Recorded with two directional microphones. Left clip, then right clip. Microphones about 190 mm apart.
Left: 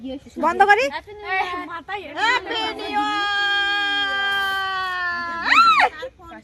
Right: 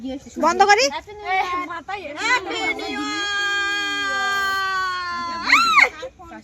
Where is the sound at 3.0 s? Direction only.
25° left (ahead or behind).